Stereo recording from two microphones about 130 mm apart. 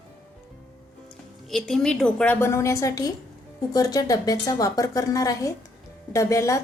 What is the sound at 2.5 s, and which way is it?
A woman's voice, 20° left (ahead or behind).